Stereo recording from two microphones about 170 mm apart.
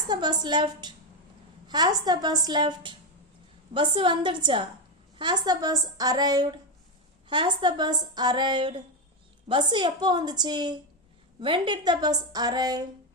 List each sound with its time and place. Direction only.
0.1 s a woman's voice: 25° right (ahead or behind)